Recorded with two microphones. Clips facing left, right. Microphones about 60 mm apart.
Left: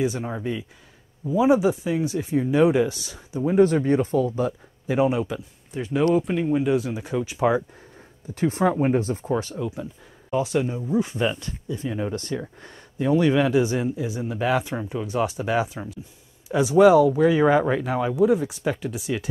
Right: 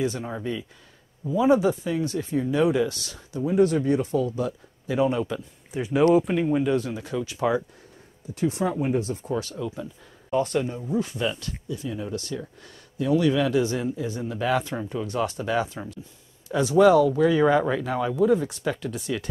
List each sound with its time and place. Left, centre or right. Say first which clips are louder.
0.0 s speech: left 2 dB; centre
3.4 s speech: left 2 dB; left
5.1 s speech: left 1 dB; centre
5.7 s speech: right 2 dB; centre
6.6 s speech: left 2 dB; centre
7.0 s speech: left 3 dB; left
8.4 s speech: left 4 dB; left; by 9.8 s centre
10.3 s speech: left 1 dB; centre